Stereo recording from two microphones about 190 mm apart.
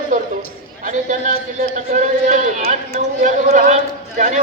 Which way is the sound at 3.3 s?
40° right (ahead or behind).